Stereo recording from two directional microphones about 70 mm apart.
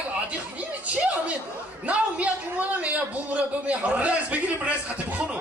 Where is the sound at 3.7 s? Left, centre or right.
Centre.